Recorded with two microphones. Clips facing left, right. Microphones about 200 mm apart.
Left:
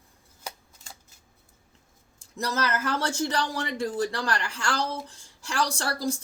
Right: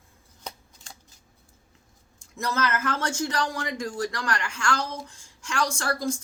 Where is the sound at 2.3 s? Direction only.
35° left (ahead or behind).